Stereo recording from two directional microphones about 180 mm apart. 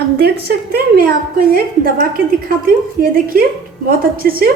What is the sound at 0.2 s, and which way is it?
A woman's voice, 60° right (ahead or behind).